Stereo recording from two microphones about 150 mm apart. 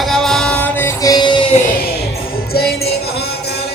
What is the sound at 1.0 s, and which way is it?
Music, 25° left (ahead or behind).